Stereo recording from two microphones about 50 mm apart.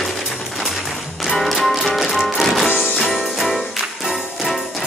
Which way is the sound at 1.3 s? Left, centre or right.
Centre.